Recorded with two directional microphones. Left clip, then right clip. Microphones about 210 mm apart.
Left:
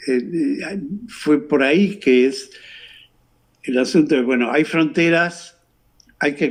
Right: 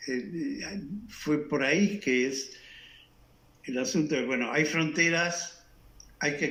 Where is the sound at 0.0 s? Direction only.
50° left (ahead or behind).